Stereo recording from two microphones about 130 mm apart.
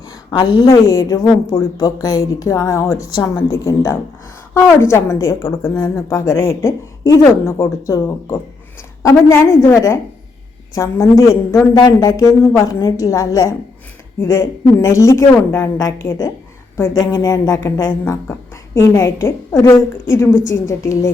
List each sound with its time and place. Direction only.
0.3 s a woman's voice: 35° left (ahead or behind)
16.9 s a woman's voice: 30° left (ahead or behind)